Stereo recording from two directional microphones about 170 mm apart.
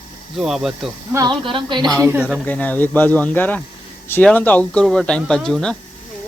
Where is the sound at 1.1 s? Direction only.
25° right (ahead or behind).